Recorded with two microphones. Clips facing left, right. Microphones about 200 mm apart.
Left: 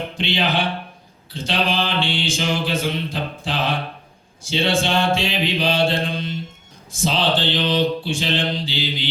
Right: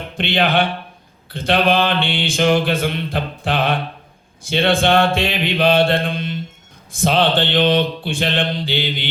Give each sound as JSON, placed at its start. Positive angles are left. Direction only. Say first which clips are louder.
{"t": 0.2, "sound": "mantra", "louder": "right 5 dB", "side_deg": -55}